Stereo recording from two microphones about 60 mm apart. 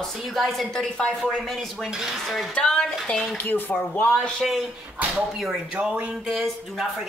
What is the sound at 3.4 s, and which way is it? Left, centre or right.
Speech, left.